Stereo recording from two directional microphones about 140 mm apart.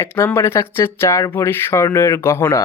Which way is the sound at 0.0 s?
15° left (ahead or behind).